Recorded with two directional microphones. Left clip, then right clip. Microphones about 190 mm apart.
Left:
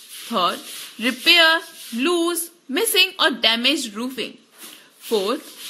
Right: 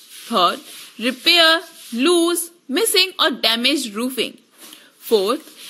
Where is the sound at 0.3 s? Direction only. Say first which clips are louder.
Right 4 dB; 20° right (ahead or behind).